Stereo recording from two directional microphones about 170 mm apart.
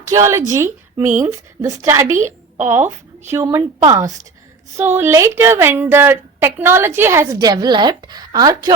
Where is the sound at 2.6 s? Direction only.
15° right (ahead or behind).